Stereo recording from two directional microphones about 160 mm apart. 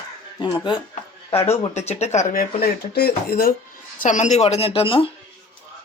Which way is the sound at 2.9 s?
75° left (ahead or behind).